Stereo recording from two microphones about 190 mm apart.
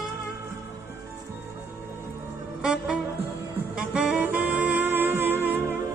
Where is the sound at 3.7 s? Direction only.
5° right (ahead or behind).